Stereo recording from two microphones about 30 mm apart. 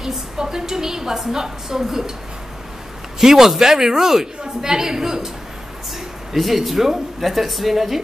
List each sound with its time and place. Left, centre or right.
0.0 s a woman's voice: centre
3.2 s a woman's voice: centre
6.3 s speech: centre